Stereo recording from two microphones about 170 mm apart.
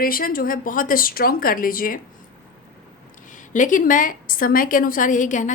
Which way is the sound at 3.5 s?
50° left (ahead or behind).